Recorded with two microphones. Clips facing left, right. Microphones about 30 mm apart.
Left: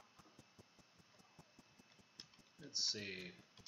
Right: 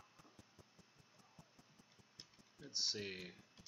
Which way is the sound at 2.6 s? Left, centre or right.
Centre.